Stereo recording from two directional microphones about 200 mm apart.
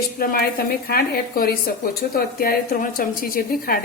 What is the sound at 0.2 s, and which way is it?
A woman's voice, 50° left (ahead or behind).